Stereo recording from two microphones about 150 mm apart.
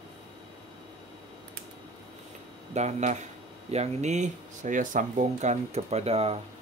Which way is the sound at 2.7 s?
50° right (ahead or behind).